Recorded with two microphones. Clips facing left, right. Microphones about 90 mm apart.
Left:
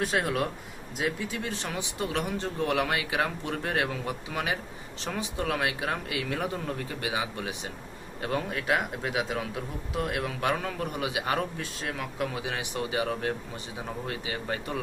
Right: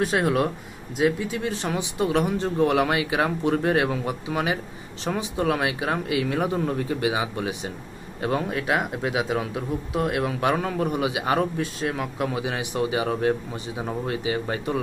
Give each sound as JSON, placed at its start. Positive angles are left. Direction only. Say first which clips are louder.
{"t": 0.0, "sound": "speech", "louder": "right 6 dB", "side_deg": -10}
{"t": 1.6, "sound": "speech", "louder": "right 8 dB", "side_deg": -20}